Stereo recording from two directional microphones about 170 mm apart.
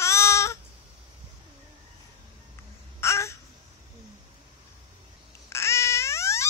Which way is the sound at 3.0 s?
15° left (ahead or behind).